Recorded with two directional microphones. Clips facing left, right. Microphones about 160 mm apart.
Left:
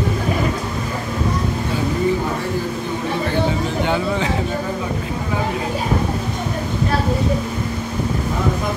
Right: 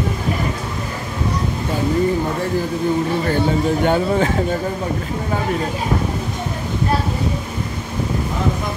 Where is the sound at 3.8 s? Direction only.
50° right (ahead or behind).